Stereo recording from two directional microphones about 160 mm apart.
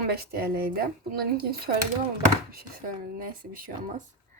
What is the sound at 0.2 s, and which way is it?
Speech, 75° right (ahead or behind).